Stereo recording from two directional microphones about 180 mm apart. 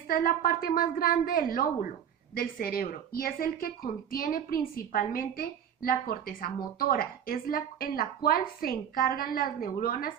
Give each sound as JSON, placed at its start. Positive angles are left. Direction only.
{"t": 0.1, "sound": "a woman's voice", "side_deg": 50}